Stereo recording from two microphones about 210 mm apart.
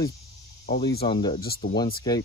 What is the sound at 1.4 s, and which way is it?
Speech, 45° left (ahead or behind).